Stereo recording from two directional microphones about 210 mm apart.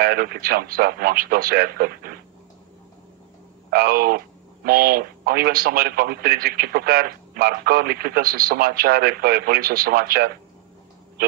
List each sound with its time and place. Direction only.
0.0 s a man's voice: 45° right (ahead or behind)
3.7 s a man's voice: 45° right (ahead or behind)